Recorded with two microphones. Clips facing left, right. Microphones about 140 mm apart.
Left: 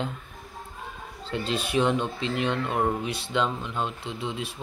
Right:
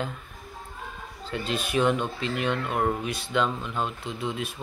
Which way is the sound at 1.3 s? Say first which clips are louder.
Left 1 dB; 30° left (ahead or behind).